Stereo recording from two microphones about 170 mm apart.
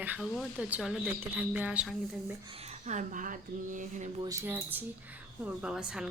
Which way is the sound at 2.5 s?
35° right (ahead or behind).